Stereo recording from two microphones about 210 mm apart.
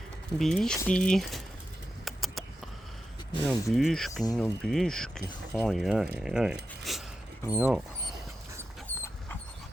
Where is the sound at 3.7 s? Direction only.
Centre (ahead or behind).